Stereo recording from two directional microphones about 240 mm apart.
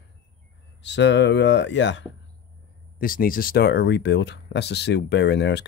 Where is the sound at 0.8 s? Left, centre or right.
Left.